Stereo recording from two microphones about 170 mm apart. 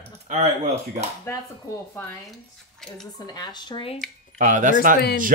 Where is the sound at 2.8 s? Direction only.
5° left (ahead or behind).